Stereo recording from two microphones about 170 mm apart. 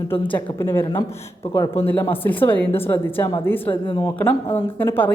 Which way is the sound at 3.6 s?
30° left (ahead or behind).